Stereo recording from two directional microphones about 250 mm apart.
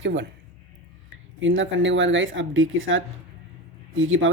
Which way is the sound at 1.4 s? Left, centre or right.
Right.